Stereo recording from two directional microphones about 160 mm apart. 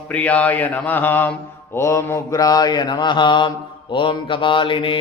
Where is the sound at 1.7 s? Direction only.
15° left (ahead or behind); by 5.0 s 35° left (ahead or behind).